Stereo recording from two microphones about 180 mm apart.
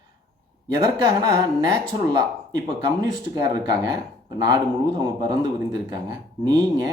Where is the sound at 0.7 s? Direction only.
25° right (ahead or behind).